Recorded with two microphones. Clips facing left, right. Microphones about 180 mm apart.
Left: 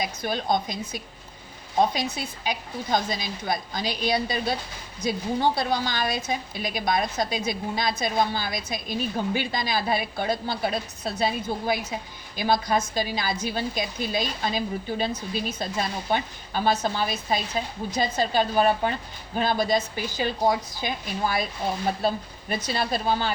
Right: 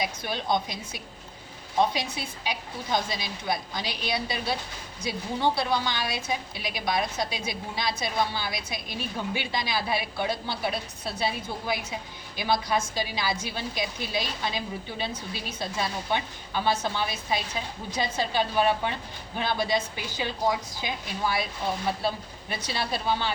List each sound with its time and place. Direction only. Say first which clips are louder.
0.0 s a woman's voice: left 3 dB; 45° left (ahead or behind)